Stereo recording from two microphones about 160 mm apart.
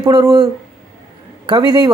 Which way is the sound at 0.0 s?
25° right (ahead or behind).